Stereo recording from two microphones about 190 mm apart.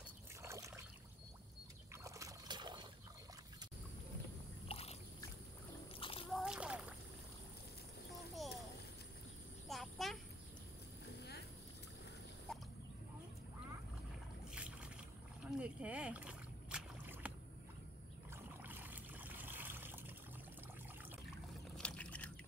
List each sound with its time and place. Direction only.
0.4 s rowboat: 15° right (ahead or behind)
2.0 s trickle: 15° right (ahead or behind)
4.6 s boat: 30° left (ahead or behind)
5.9 s splash: 30° left (ahead or behind)
6.3 s splash: 5° right (ahead or behind)
9.7 s a sound: centre (ahead or behind)
14.5 s boat: 5° right (ahead or behind)
18.3 s a sound: 10° right (ahead or behind)
21.7 s a sound: 5° left (ahead or behind)